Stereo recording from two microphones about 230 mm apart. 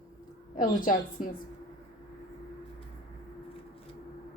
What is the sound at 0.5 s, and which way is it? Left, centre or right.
Speech, left.